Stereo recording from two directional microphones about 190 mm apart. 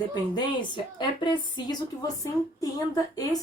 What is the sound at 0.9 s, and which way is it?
Speech, 25° left (ahead or behind).